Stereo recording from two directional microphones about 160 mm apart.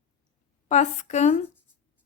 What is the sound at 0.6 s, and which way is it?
Speech, 45° left (ahead or behind).